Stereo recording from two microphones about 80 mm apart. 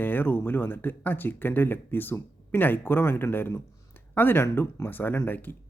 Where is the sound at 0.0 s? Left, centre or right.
Left.